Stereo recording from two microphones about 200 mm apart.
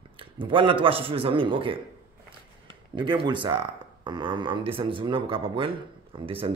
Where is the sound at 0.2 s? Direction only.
25° right (ahead or behind).